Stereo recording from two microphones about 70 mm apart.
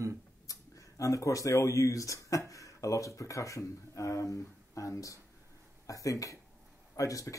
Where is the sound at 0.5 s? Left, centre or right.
Left.